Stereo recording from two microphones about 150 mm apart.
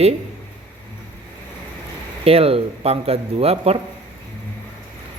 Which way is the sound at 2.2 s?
40° right (ahead or behind).